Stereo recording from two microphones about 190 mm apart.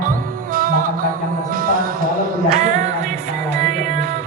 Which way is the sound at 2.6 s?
40° right (ahead or behind).